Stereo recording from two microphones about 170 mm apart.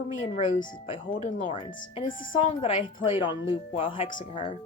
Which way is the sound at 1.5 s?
35° left (ahead or behind).